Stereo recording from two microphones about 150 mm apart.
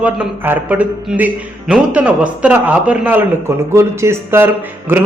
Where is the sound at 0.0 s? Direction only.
10° right (ahead or behind).